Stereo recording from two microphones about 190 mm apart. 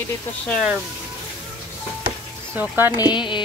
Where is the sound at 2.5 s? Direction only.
10° right (ahead or behind).